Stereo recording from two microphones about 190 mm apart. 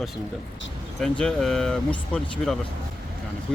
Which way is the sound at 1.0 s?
Centre (ahead or behind).